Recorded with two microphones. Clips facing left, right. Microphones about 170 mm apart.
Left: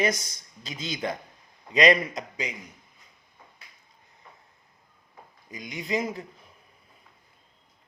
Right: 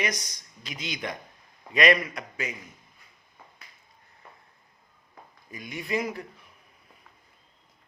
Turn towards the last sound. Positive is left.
turn(degrees=25)  # may be behind; listen again after turning